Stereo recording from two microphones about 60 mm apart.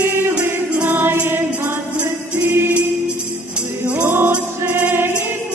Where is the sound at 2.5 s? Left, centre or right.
Right.